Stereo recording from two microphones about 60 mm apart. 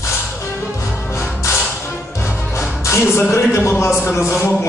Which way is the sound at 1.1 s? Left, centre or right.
Left.